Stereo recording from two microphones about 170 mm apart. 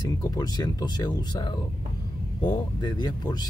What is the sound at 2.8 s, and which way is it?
Speech, 25° left (ahead or behind).